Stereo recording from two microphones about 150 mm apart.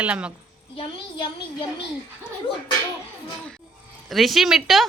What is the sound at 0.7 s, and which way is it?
Speech, 30° left (ahead or behind).